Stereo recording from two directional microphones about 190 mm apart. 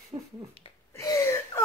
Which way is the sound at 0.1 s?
25° right (ahead or behind).